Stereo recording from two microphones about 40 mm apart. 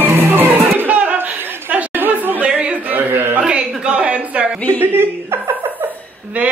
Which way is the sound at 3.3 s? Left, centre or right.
Right.